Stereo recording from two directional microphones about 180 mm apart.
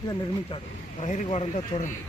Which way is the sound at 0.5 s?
30° left (ahead or behind).